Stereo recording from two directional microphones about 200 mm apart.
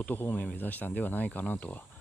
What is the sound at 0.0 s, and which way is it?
Speech, 10° left (ahead or behind).